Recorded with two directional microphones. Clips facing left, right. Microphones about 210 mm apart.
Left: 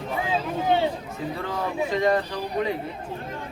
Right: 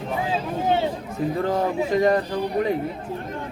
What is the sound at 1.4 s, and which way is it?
Speech, 45° right (ahead or behind).